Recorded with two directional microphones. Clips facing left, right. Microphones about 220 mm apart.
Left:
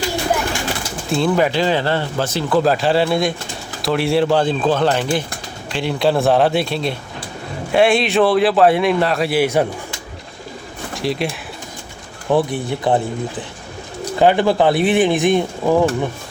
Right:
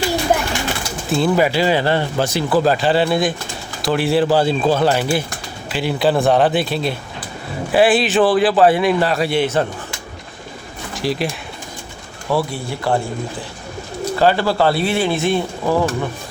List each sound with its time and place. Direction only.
1.1 s speech: 5° right (ahead or behind)
2.6 s a man's voice: centre (ahead or behind)
10.9 s speech: centre (ahead or behind)
12.3 s speech: 20° left (ahead or behind)